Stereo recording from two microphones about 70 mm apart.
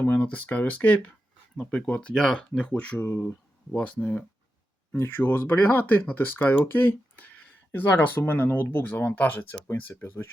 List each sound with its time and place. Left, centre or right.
0.0 s speech: left
3.0 s speech: left
3.7 s speech: centre
4.9 s speech: left